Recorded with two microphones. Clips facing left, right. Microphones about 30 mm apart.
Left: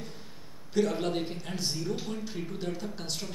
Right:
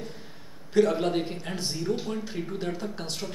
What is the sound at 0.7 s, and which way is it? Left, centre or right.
A man's voice, centre.